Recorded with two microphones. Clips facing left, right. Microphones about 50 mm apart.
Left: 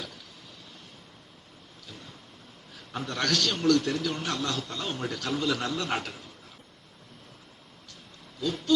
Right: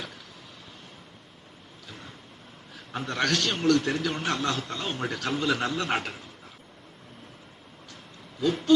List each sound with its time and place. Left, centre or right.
2.7 s a sound: centre
3.2 s a man's voice: centre
4.5 s a man's voice: centre
6.1 s a man's voice: centre
8.4 s a man's voice: right